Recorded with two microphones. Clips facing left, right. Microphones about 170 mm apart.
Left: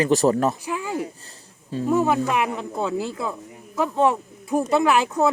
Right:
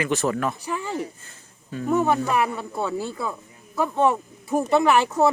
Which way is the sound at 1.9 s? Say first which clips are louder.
Left 1 dB; centre (ahead or behind).